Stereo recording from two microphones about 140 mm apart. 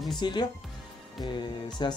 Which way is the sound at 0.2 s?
30° left (ahead or behind).